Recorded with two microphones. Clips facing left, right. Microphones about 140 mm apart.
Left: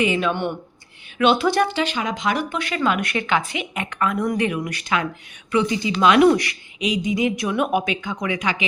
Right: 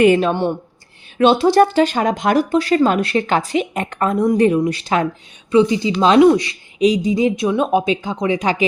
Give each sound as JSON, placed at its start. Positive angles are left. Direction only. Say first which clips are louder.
{"t": 0.2, "sound": "a woman's voice", "louder": "right 5 dB", "side_deg": -35}
{"t": 6.7, "sound": "speech", "louder": "right 7 dB", "side_deg": -35}